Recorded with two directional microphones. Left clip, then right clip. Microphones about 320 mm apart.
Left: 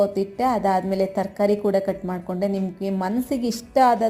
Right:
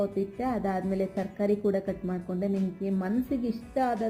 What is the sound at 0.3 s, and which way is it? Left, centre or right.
A woman's voice, centre.